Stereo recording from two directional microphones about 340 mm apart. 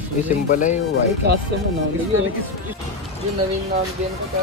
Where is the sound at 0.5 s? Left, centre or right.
Left.